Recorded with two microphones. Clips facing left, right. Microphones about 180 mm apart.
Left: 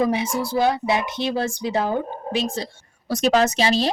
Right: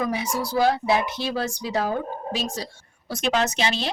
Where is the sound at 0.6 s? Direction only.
20° left (ahead or behind).